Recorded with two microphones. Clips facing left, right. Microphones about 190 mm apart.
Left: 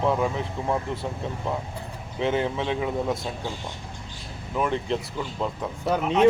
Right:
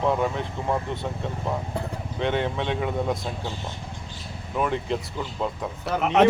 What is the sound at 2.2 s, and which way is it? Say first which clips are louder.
Speech: left 1 dB; centre (ahead or behind).